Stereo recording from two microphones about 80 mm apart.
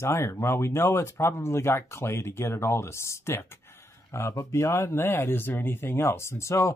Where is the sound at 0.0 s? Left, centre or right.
Left.